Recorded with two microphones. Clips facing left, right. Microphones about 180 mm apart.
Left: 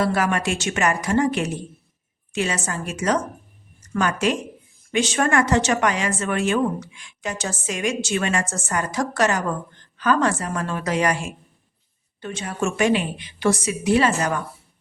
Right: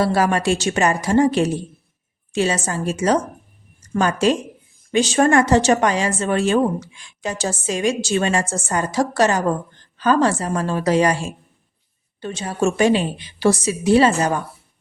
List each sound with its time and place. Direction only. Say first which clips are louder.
0.0 s speech: right 3 dB; 30° right (ahead or behind)